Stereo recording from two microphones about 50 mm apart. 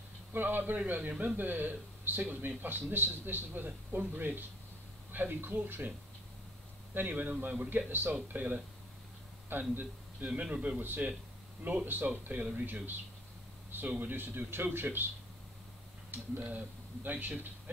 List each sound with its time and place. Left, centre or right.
0.3 s a man's voice: right
6.9 s a man's voice: right
16.1 s speech: right